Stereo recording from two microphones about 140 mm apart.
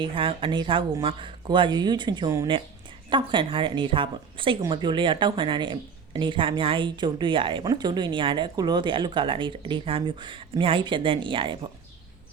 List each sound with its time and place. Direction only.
0.0 s speech: 40° right (ahead or behind)